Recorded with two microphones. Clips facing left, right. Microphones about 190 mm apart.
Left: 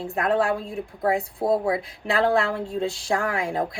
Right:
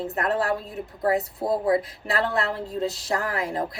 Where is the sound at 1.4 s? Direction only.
25° left (ahead or behind).